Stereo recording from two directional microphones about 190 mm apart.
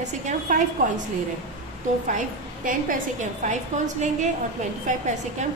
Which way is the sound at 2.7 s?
45° right (ahead or behind).